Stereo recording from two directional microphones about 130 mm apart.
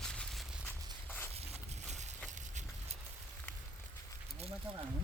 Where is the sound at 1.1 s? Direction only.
15° left (ahead or behind).